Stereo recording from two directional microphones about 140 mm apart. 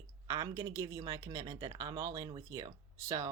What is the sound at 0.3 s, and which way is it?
Speech, 30° right (ahead or behind).